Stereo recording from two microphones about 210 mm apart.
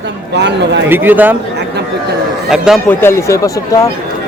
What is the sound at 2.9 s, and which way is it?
Speech, 10° left (ahead or behind).